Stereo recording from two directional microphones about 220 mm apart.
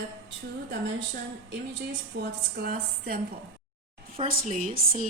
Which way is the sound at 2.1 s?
50° right (ahead or behind).